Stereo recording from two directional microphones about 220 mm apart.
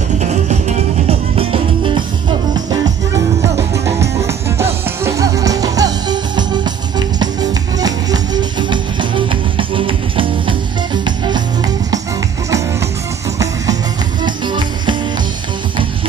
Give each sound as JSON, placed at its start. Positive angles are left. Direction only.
{"t": 0.2, "sound": "music", "side_deg": -30}
{"t": 14.2, "sound": "music", "side_deg": -20}